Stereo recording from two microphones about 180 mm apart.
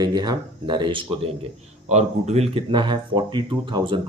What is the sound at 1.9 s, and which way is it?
Speech, 40° right (ahead or behind).